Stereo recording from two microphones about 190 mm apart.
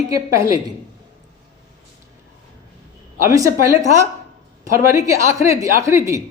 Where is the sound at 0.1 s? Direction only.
20° right (ahead or behind).